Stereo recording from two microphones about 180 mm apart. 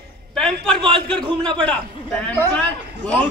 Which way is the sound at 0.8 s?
30° right (ahead or behind).